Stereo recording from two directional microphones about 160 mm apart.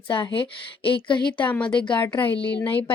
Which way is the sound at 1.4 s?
10° left (ahead or behind).